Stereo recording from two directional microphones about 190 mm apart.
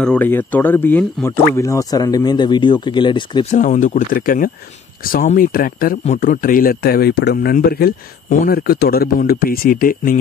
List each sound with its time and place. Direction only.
0.0 s speech: 10° left (ahead or behind); by 3.4 s 25° left (ahead or behind)
3.5 s speech: 40° left (ahead or behind)